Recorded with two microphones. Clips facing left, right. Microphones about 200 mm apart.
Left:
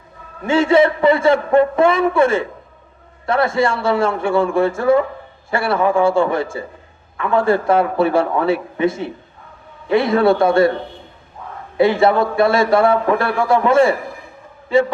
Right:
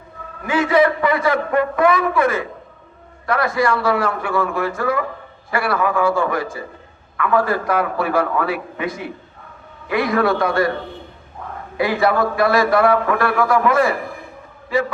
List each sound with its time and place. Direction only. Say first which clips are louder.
0.4 s speech: left 3 dB; 25° left (ahead or behind)
11.8 s speech: left 4 dB; 25° left (ahead or behind)